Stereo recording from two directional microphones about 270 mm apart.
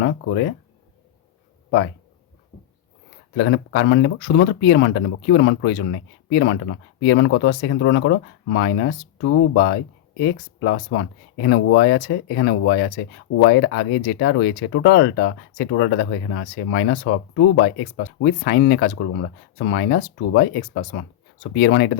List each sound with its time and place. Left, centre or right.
0.0 s speech: left
3.3 s speech: left